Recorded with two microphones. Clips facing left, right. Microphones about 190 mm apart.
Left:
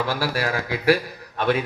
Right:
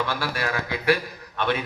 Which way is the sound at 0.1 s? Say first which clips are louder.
Left 3 dB; 35° left (ahead or behind).